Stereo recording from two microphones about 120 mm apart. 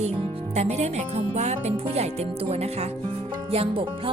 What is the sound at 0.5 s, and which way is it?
Speech, 65° right (ahead or behind).